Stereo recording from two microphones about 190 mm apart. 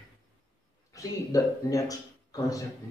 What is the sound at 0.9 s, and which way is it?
Speech, 15° left (ahead or behind).